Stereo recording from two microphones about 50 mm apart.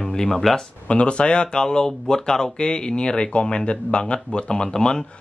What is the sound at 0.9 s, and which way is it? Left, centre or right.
Speech, left.